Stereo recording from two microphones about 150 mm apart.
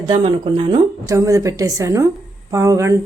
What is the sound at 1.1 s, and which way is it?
Speech, 20° right (ahead or behind).